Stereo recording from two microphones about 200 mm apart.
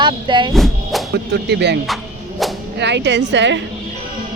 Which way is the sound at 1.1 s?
55° right (ahead or behind).